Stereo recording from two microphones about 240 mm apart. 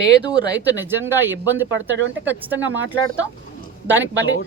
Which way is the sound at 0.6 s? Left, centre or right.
Centre.